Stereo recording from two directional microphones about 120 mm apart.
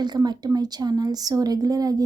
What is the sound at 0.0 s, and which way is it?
A woman's voice, 35° right (ahead or behind).